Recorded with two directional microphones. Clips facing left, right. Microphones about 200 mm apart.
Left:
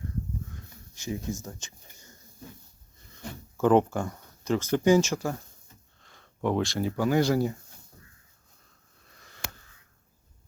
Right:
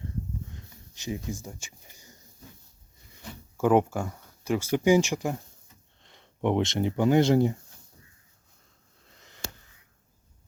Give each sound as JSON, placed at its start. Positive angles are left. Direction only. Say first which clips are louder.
{"t": 0.9, "sound": "speech", "louder": "left 1 dB", "side_deg": -20}
{"t": 3.6, "sound": "speech", "louder": "left 1 dB", "side_deg": -10}
{"t": 9.0, "sound": "a sound", "louder": "right 1 dB", "side_deg": -20}